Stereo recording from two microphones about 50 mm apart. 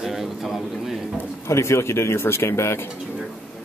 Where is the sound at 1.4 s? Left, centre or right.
Left.